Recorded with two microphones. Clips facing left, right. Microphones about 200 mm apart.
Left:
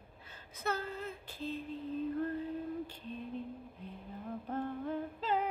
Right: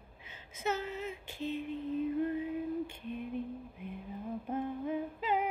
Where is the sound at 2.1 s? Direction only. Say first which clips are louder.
Right 3 dB; 10° right (ahead or behind).